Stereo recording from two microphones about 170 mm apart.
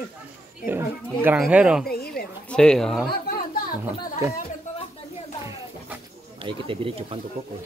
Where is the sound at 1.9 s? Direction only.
65° left (ahead or behind).